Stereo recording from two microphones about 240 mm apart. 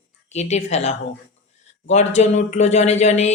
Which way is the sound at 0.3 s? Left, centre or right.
Left.